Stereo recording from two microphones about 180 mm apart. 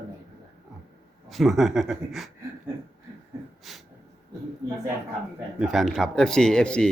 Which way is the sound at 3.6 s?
Centre (ahead or behind).